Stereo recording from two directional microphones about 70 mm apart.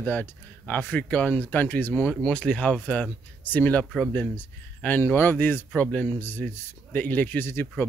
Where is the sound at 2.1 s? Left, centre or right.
Centre.